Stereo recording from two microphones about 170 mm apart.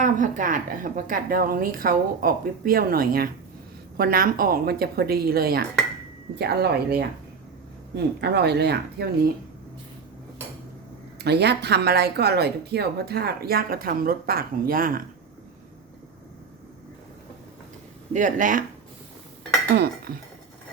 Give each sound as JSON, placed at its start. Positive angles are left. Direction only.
{"t": 0.0, "sound": "a woman's voice", "side_deg": -50}
{"t": 11.2, "sound": "speech", "side_deg": -75}
{"t": 18.1, "sound": "speech", "side_deg": -50}
{"t": 19.7, "sound": "speech", "side_deg": -70}